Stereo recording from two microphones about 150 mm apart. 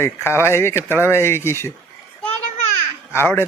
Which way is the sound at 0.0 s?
15° left (ahead or behind).